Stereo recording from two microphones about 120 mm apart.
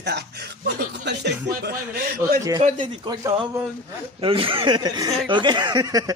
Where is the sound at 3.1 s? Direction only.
35° right (ahead or behind).